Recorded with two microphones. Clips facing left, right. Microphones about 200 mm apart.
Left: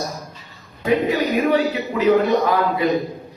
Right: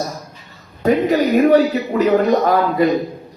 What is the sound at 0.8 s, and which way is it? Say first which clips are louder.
A woman's voice: right 4 dB; 40° right (ahead or behind).